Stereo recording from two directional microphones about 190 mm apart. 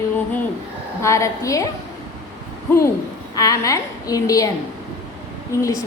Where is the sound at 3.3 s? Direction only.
20° left (ahead or behind).